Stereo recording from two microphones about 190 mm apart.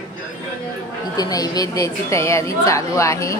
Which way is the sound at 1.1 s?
20° left (ahead or behind).